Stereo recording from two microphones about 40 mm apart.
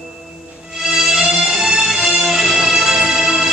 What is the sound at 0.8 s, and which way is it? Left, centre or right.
Music, centre.